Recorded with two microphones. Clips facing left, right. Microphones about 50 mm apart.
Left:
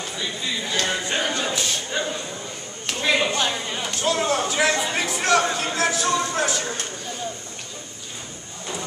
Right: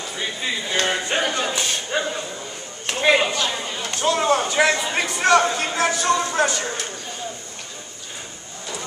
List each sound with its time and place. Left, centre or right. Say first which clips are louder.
0.2 s speech: right 3 dB; right
0.8 s a sound: right 3 dB; centre
2.9 s speech: right 4 dB; right
3.9 s speech: right 4 dB; centre